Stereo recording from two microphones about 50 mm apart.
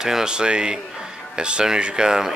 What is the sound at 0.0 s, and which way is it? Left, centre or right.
Speech, centre.